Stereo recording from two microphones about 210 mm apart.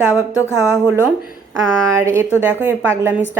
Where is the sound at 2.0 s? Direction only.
15° right (ahead or behind).